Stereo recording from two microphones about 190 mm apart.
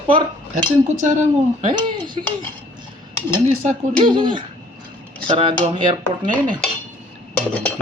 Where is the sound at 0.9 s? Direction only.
40° right (ahead or behind).